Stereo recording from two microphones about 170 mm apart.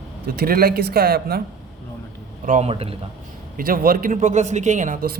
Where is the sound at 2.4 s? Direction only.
45° right (ahead or behind).